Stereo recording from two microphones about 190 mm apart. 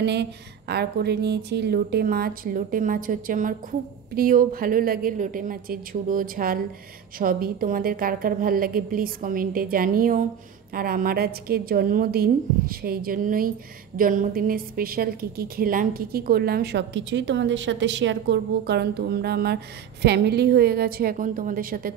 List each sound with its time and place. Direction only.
0.0 s a woman's voice: 65° right (ahead or behind)